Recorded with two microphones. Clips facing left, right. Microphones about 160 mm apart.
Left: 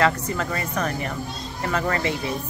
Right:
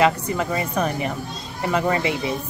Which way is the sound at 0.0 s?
15° right (ahead or behind).